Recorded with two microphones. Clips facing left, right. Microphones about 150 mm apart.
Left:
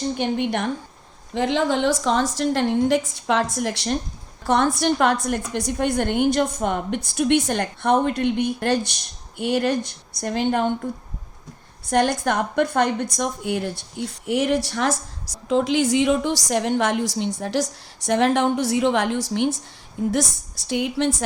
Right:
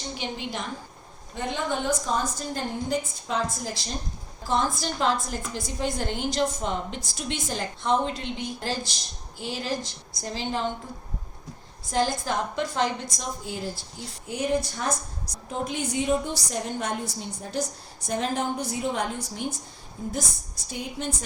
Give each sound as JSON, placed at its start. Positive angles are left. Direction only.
{"t": 0.2, "sound": "a woman's voice", "side_deg": 60}
{"t": 1.3, "sound": "a woman's voice", "side_deg": 90}
{"t": 11.9, "sound": "a woman's voice", "side_deg": 65}